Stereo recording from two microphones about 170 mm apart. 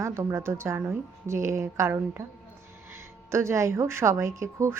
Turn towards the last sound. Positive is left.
turn(degrees=-15)  # may be behind; listen again after turning